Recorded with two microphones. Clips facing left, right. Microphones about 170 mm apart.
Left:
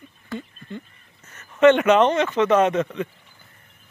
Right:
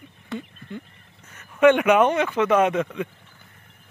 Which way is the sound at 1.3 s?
10° right (ahead or behind).